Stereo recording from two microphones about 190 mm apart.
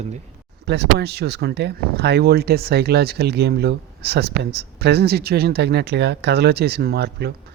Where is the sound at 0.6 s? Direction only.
60° right (ahead or behind).